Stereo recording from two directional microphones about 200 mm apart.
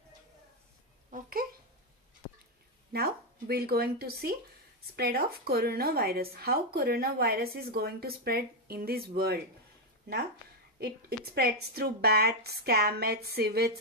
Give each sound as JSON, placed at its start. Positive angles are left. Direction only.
{"t": 2.9, "sound": "speech", "side_deg": -50}
{"t": 10.8, "sound": "speech", "side_deg": -50}